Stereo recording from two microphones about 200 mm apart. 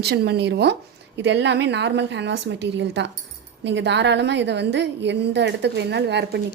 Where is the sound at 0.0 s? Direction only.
55° right (ahead or behind).